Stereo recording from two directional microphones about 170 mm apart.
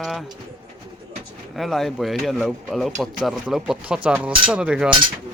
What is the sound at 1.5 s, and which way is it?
Speech, centre (ahead or behind).